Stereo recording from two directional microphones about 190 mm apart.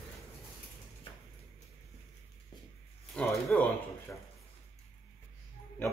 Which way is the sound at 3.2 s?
5° left (ahead or behind).